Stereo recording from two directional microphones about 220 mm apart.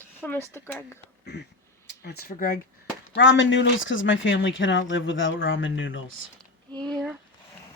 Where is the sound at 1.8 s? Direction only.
45° left (ahead or behind).